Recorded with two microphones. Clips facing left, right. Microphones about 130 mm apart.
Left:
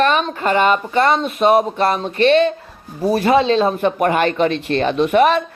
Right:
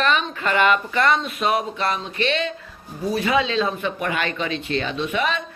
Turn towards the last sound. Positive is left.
turn(degrees=50)  # may be behind; listen again after turning